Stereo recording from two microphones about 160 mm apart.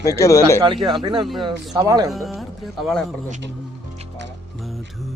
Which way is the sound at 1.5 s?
25° right (ahead or behind).